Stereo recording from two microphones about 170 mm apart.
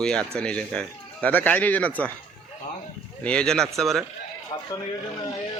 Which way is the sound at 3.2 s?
5° left (ahead or behind).